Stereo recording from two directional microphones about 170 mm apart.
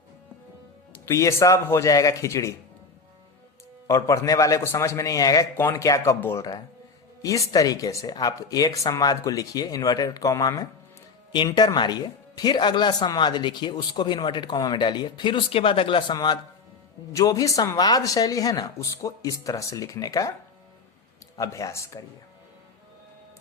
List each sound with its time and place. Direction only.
1.0 s speech: 15° left (ahead or behind)
3.8 s speech: 20° left (ahead or behind)
21.3 s speech: 20° left (ahead or behind)